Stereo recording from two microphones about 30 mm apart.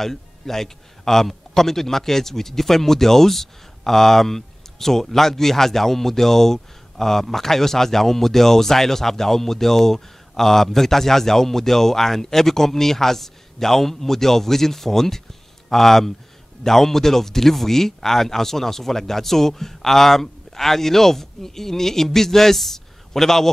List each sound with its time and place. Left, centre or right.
0.0 s a man's voice: centre